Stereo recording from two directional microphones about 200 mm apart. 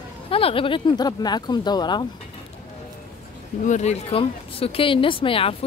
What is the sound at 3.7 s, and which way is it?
Speech, 35° left (ahead or behind).